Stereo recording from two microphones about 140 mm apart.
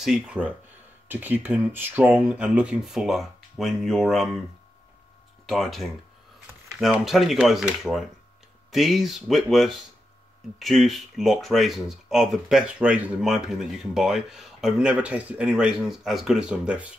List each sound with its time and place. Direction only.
0.0 s speech: 5° right (ahead or behind)
5.5 s speech: centre (ahead or behind)